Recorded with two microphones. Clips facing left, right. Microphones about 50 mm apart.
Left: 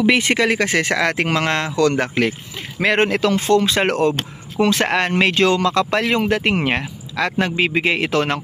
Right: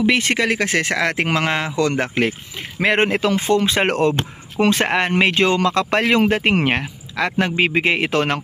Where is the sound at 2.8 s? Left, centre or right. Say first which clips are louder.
Even; centre.